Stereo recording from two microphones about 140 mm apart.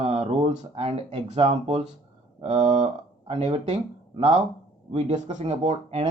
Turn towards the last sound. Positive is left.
turn(degrees=-50)  # may be behind; listen again after turning